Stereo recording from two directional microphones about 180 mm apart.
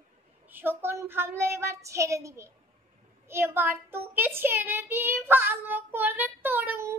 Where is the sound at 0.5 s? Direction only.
10° right (ahead or behind).